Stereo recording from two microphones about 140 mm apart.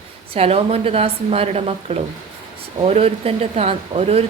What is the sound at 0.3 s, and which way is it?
Speech, 45° right (ahead or behind).